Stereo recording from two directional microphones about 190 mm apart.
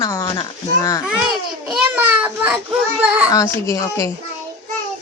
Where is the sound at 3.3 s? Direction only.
15° left (ahead or behind).